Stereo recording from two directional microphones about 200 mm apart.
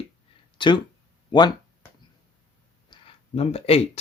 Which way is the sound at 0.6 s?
25° left (ahead or behind).